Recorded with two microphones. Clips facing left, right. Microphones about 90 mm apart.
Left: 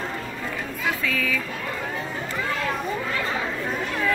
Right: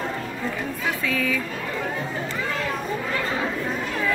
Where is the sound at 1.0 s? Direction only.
25° right (ahead or behind).